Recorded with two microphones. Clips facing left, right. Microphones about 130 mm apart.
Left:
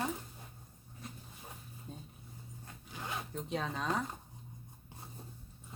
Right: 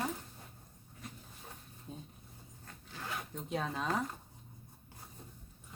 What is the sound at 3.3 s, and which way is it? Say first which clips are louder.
Speech: right 1 dB; centre (ahead or behind).